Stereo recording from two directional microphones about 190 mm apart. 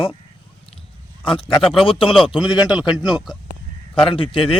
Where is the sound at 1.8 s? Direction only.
30° left (ahead or behind).